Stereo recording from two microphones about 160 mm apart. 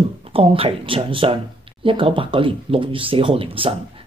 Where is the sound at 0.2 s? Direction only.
35° right (ahead or behind).